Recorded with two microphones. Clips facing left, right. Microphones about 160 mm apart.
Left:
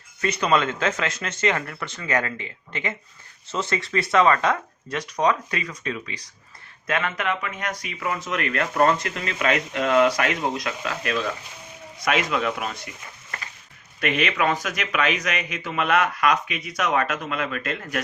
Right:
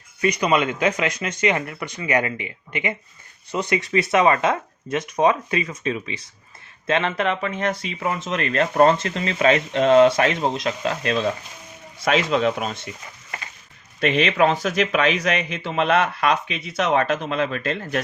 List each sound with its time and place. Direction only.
0.2 s speech: 15° right (ahead or behind)
14.0 s speech: 30° right (ahead or behind)